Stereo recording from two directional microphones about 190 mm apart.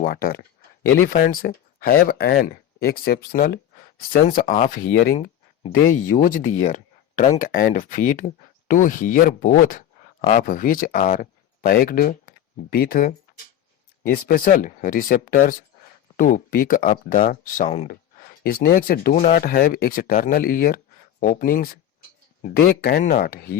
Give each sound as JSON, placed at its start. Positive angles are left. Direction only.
{"t": 0.0, "sound": "speech", "side_deg": 50}